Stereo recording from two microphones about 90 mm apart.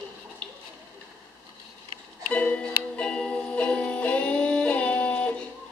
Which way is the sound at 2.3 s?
15° left (ahead or behind).